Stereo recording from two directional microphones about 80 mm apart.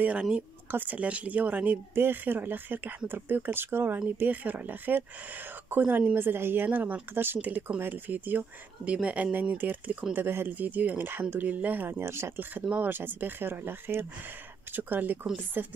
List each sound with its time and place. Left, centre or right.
0.0 s speech: centre